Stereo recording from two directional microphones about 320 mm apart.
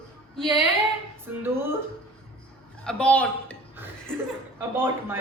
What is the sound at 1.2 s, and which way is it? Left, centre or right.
Speech, centre.